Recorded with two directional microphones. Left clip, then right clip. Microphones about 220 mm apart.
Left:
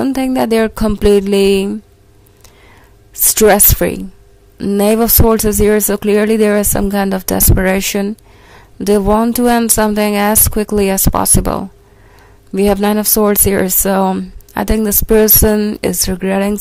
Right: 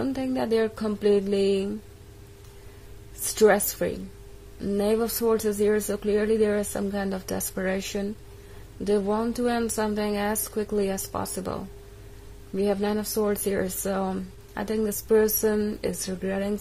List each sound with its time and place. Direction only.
0.0 s speech: 40° left (ahead or behind)
3.3 s speech: 40° left (ahead or behind)